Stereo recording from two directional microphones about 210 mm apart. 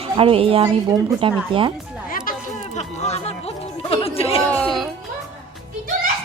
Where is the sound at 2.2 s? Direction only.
35° left (ahead or behind).